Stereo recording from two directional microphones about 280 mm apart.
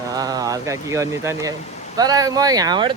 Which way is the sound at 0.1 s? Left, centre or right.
Centre.